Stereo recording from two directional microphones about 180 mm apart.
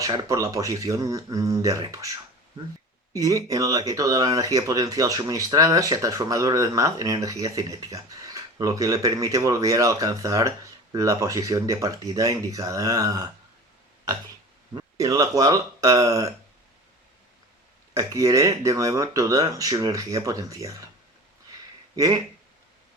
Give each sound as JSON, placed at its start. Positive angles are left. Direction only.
{"t": 0.0, "sound": "speech", "side_deg": -20}
{"t": 14.8, "sound": "speech", "side_deg": -20}
{"t": 17.9, "sound": "speech", "side_deg": -20}
{"t": 21.9, "sound": "speech", "side_deg": -20}